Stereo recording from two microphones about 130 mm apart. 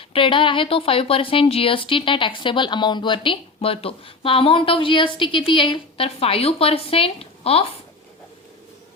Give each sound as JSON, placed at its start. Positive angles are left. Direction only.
{"t": 0.1, "sound": "a woman's voice", "side_deg": 40}